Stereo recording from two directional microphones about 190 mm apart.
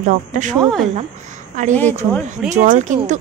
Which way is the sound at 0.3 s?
40° right (ahead or behind).